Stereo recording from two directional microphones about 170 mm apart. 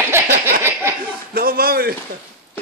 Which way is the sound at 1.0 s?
60° right (ahead or behind).